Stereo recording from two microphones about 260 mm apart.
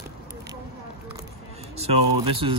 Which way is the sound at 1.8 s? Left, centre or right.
Right.